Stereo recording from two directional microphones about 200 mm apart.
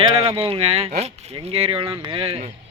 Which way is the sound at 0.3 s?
30° right (ahead or behind).